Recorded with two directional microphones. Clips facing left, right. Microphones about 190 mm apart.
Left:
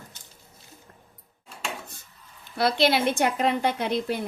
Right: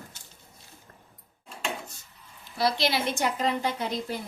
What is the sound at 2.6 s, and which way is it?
A woman's voice, 55° left (ahead or behind).